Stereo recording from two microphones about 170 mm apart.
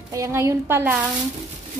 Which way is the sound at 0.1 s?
15° right (ahead or behind).